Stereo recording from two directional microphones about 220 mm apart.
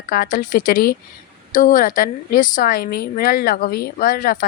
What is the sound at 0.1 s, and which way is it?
Speech, 40° left (ahead or behind).